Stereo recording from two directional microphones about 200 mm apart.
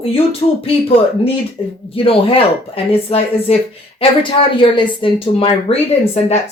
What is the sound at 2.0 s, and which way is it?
Speech, 30° left (ahead or behind).